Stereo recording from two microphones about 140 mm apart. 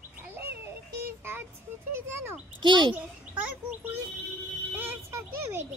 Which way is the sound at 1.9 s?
15° right (ahead or behind).